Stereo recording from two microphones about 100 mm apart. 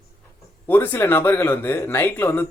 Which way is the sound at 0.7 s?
20° left (ahead or behind).